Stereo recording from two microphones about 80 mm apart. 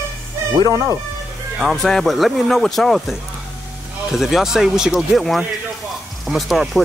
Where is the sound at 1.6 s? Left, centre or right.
Centre.